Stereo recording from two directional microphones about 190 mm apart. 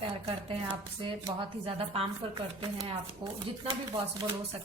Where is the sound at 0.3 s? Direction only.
25° right (ahead or behind).